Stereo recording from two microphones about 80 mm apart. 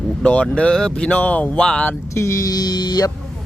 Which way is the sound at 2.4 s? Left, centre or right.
Left.